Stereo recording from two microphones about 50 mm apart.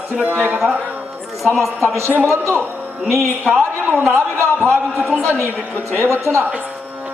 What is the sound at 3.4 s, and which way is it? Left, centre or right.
Speech, right.